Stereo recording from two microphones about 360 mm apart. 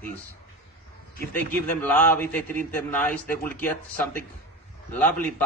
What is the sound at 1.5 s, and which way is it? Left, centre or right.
A man's voice, centre.